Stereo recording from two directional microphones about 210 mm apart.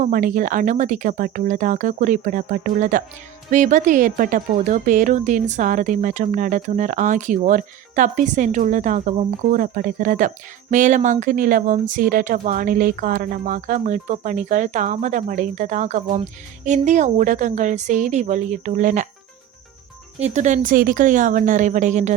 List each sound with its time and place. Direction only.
0.0 s a woman's voice: 40° right (ahead or behind)
20.1 s a woman's voice: 35° right (ahead or behind)